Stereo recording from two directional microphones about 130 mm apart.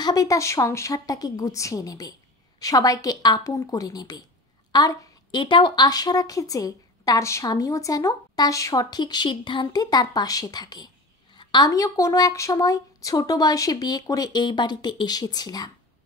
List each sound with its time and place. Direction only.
0.0 s a woman's voice: 30° left (ahead or behind)